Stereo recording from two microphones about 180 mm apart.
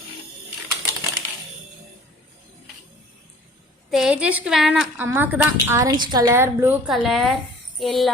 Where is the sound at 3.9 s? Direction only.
5° right (ahead or behind).